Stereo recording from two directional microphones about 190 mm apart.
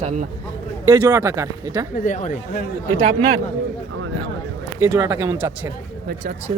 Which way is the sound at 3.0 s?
25° right (ahead or behind).